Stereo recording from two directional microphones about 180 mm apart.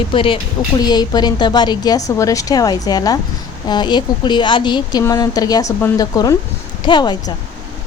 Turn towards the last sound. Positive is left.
turn(degrees=25)  # may be behind; listen again after turning